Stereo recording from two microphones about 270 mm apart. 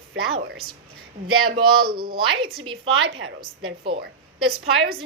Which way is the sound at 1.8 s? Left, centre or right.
Right.